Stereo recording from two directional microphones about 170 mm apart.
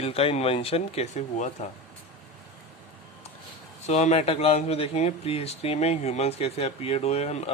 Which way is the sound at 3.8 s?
40° left (ahead or behind).